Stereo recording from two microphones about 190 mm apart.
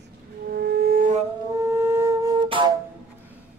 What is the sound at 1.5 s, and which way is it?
Flute, 15° right (ahead or behind).